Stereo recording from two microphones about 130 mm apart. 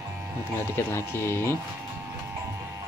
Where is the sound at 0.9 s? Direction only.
20° left (ahead or behind).